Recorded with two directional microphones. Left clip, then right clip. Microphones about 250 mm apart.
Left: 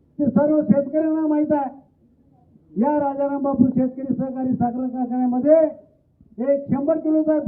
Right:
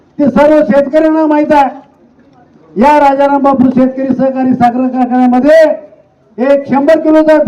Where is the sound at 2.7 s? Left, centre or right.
Centre.